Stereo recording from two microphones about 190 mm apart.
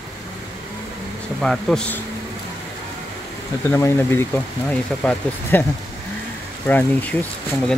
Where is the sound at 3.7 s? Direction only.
15° left (ahead or behind).